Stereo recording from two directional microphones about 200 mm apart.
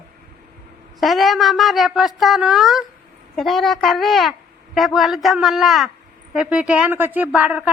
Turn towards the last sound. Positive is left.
turn(degrees=-5)  # may be behind; listen again after turning